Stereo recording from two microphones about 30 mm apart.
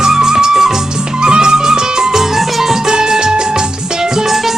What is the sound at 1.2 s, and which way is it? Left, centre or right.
Music, right.